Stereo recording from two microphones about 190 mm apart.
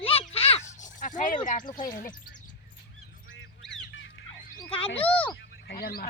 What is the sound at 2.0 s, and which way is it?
Speech, 45° left (ahead or behind).